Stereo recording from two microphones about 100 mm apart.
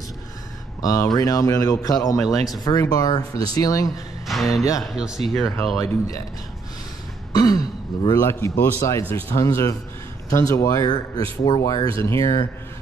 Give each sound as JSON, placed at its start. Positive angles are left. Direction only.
{"t": 0.8, "sound": "speech", "side_deg": 40}
{"t": 4.3, "sound": "speech", "side_deg": 0}
{"t": 7.3, "sound": "throat clearing", "side_deg": 40}
{"t": 8.2, "sound": "speech", "side_deg": 25}